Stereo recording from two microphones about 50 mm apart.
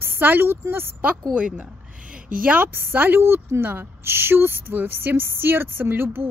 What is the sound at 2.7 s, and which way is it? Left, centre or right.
A woman's voice, right.